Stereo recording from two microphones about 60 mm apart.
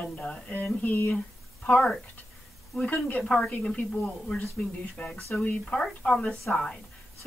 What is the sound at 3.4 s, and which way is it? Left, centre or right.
A woman's voice, centre.